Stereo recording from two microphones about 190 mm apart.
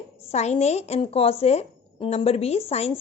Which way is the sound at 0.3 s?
35° left (ahead or behind).